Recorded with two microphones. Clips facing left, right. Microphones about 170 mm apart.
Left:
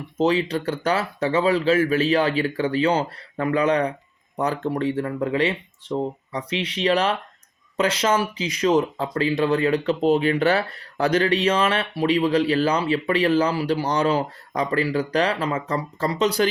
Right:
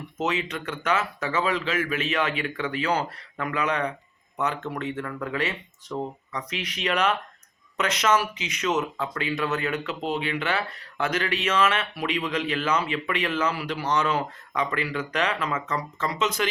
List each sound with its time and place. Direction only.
0.2 s speech: 35° left (ahead or behind)